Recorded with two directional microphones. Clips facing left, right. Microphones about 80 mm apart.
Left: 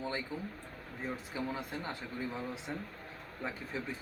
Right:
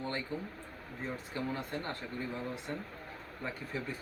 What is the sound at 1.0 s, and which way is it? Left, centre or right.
Speech, centre.